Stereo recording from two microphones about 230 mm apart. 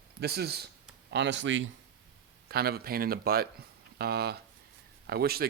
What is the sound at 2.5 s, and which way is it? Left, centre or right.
Speech, right.